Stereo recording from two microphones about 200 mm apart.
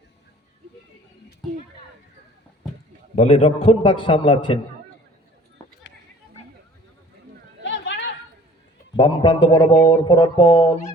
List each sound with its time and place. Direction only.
3.2 s a man's voice: 30° left (ahead or behind)
7.6 s chatter: 65° left (ahead or behind)
9.0 s a man's voice: 25° left (ahead or behind)
9.8 s mantra: 15° left (ahead or behind)